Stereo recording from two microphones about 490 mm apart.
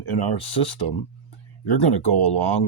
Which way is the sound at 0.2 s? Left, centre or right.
Left.